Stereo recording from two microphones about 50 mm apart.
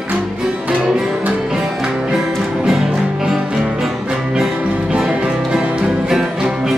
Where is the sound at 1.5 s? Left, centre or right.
Centre.